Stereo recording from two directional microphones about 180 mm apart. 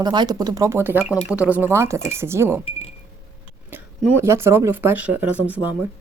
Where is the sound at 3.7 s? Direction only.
10° right (ahead or behind).